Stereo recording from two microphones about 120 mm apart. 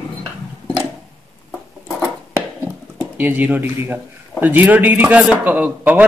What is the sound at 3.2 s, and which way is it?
A man's voice, 15° right (ahead or behind).